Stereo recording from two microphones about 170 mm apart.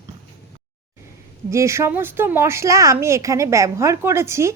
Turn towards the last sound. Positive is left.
turn(degrees=-15)  # may be behind; listen again after turning